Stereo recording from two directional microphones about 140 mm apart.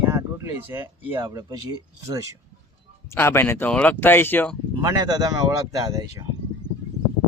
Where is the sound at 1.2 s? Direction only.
25° right (ahead or behind).